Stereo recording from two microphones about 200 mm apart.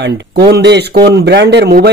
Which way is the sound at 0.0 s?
60° right (ahead or behind).